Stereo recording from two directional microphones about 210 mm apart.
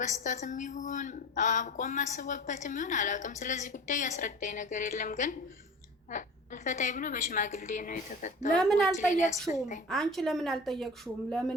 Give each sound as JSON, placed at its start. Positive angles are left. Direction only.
{"t": 0.0, "sound": "a woman's voice", "side_deg": 35}
{"t": 8.5, "sound": "speech", "side_deg": 0}
{"t": 9.0, "sound": "a woman's voice", "side_deg": 35}
{"t": 9.9, "sound": "speech", "side_deg": 0}